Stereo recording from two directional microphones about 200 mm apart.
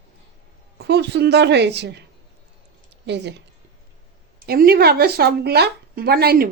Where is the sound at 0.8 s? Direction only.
55° right (ahead or behind).